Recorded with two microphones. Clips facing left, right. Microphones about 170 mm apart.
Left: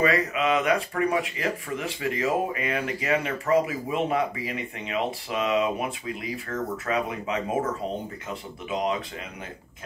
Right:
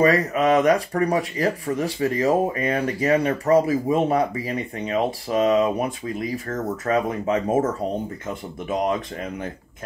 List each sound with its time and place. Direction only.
0.0 s speech: 40° right (ahead or behind)